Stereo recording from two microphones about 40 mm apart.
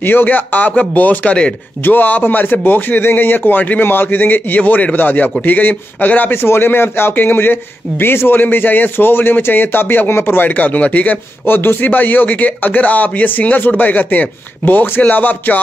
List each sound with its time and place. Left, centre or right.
0.0 s a man's voice: left
3.8 s a man's voice: left
6.3 s a man's voice: left
10.5 s speech: left
11.4 s a man's voice: left